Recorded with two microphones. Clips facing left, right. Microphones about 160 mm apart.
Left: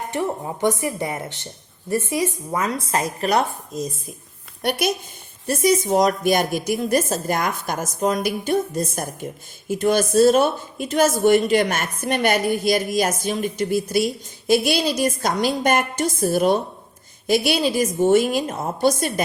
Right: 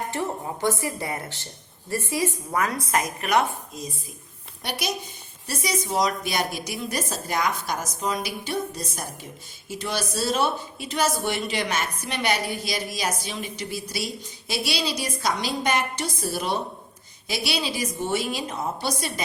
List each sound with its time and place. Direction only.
0.1 s speech: 20° left (ahead or behind); by 4.1 s 40° left (ahead or behind)
5.5 s a woman's voice: 50° left (ahead or behind)